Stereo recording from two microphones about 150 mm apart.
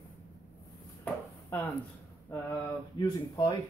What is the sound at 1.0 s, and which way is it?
Chopping, 20° left (ahead or behind).